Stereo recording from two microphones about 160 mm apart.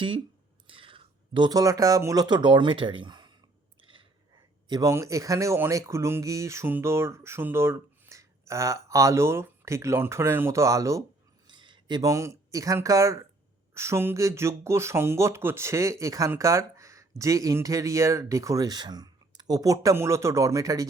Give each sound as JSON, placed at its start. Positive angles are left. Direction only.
{"t": 0.7, "sound": "speech", "side_deg": -35}
{"t": 3.8, "sound": "a sound", "side_deg": -30}
{"t": 4.7, "sound": "speech", "side_deg": -20}